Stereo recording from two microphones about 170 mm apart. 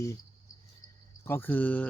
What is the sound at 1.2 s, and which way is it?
Speech, 15° left (ahead or behind).